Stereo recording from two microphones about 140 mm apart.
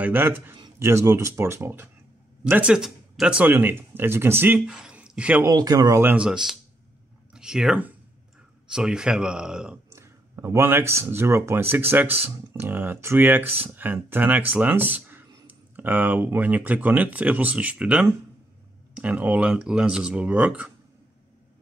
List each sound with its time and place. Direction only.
0.0 s speech: 15° right (ahead or behind)
4.6 s speech: 5° right (ahead or behind)
5.4 s speech: 25° right (ahead or behind)
6.1 s speech: 5° right (ahead or behind)
9.9 s speech: 20° right (ahead or behind)